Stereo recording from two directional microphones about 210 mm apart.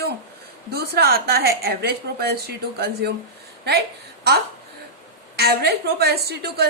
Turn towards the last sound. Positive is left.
turn(degrees=-50)  # may be behind; listen again after turning